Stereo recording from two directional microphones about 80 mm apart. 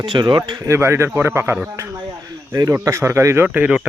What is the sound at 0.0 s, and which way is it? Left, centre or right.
Speech, right.